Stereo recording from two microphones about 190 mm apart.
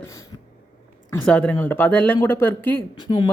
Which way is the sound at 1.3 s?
5° left (ahead or behind).